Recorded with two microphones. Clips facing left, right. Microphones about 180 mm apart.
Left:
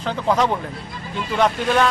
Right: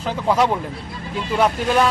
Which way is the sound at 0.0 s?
5° right (ahead or behind).